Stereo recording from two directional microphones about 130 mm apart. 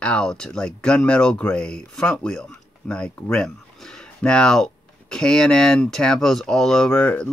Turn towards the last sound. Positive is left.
turn(degrees=10)  # may be behind; listen again after turning